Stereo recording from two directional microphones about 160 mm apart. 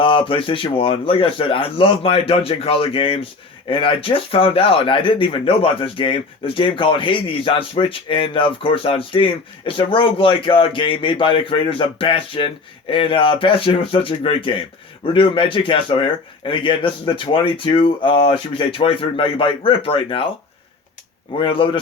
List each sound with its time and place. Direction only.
0.0 s speech: 30° left (ahead or behind)
21.3 s speech: 35° left (ahead or behind)